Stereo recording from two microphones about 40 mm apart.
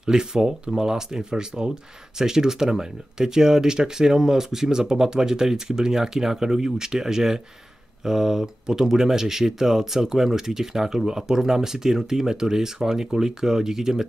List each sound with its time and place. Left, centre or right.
0.0 s speech: centre